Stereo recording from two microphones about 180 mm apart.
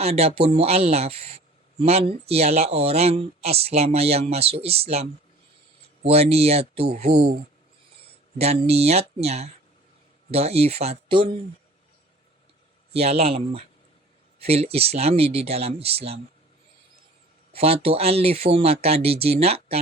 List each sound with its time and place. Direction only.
0.0 s speech: 35° right (ahead or behind)
8.4 s speech: 35° right (ahead or behind)
12.9 s speech: 35° right (ahead or behind)
17.5 s speech: 35° right (ahead or behind)